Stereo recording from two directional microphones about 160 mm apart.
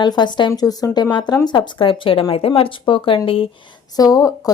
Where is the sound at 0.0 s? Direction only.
25° left (ahead or behind).